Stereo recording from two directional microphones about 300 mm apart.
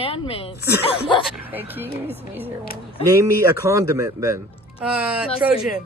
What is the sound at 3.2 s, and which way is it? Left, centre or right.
Speech, centre.